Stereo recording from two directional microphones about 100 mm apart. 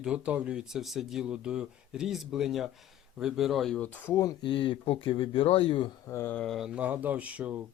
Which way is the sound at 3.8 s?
20° left (ahead or behind).